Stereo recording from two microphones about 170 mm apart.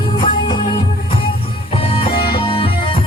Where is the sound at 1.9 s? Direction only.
35° left (ahead or behind).